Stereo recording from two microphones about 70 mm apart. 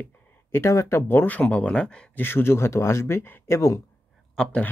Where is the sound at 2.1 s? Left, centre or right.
Left.